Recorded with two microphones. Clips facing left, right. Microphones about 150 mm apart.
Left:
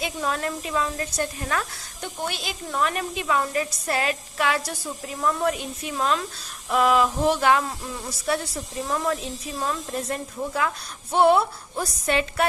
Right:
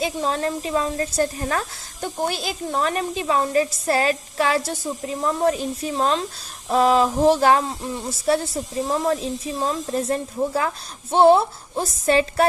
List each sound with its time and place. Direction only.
0.0 s a woman's voice: 30° right (ahead or behind)